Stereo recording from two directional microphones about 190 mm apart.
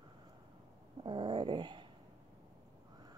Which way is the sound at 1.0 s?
25° right (ahead or behind).